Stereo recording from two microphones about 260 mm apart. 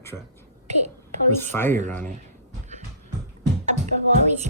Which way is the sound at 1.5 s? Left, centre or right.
Centre.